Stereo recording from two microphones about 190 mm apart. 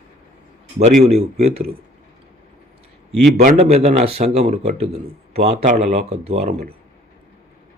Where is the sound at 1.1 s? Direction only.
35° right (ahead or behind).